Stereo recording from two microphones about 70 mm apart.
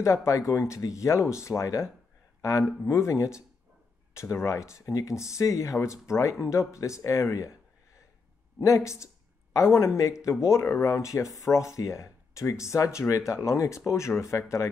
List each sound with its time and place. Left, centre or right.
0.0 s speech: left
2.9 s speech: left
8.5 s speech: left